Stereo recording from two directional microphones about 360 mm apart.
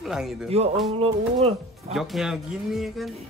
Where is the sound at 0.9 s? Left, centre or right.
Centre.